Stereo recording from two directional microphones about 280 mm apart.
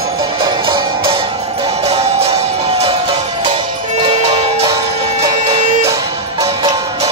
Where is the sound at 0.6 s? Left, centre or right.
Centre.